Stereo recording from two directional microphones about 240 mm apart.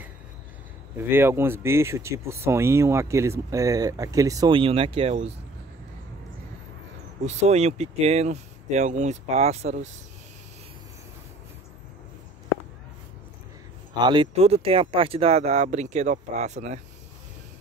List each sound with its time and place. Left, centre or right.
0.9 s speech: centre; by 5.3 s right
7.2 s speech: right
14.0 s speech: right